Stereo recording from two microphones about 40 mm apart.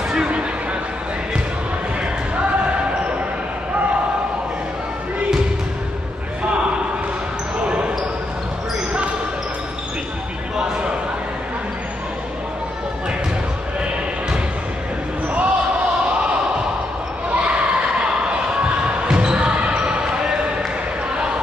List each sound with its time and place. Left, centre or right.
2.3 s basketball bounce: right
7.6 s basketball bounce: right
10.6 s a sound: right
15.2 s basketball bounce: right
17.3 s a sound: right
19.1 s basketball bounce: right